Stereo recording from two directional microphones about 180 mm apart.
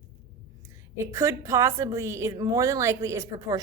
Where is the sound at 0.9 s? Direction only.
15° right (ahead or behind).